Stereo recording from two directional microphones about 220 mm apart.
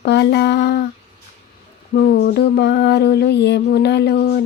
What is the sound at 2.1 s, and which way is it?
Speech, 45° left (ahead or behind).